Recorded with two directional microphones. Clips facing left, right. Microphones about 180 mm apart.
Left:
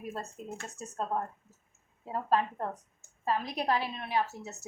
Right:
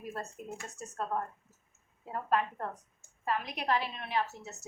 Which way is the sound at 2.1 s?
30° left (ahead or behind).